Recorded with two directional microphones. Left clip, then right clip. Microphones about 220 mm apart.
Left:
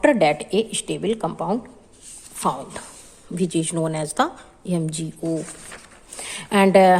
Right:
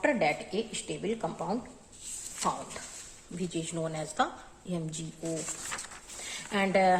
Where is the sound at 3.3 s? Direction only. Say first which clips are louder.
Left 12 dB; 50° left (ahead or behind).